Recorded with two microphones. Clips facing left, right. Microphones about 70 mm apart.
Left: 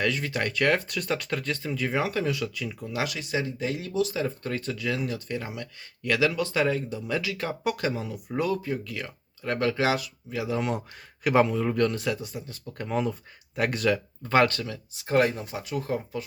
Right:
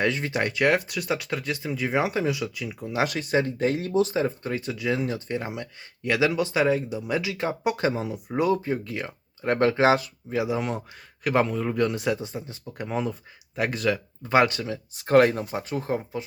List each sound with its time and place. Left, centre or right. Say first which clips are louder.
0.0 s speech: right 2 dB; right
3.1 s speech: right 5 dB; right
10.6 s speech: left 1 dB; centre
11.9 s speech: right 3 dB; right
14.9 s speech: right 5 dB; right